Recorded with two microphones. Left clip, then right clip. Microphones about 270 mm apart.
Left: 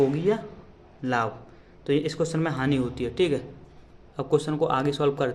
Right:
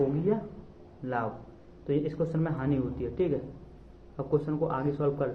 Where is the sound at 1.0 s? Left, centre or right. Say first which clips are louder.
Left 6 dB; left.